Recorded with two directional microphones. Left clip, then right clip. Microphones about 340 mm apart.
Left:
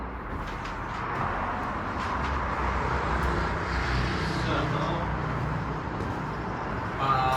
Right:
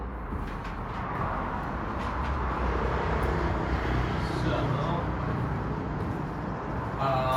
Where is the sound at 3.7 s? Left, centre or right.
Right.